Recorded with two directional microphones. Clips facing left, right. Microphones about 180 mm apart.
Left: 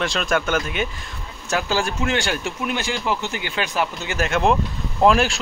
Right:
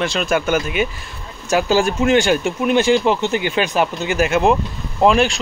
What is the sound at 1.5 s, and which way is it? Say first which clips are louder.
Speech: right 7 dB; 15° right (ahead or behind).